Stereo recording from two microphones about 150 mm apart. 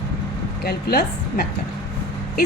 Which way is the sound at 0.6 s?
90° left.